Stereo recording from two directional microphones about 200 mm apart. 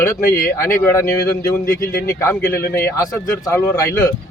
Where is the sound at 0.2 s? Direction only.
45° left (ahead or behind).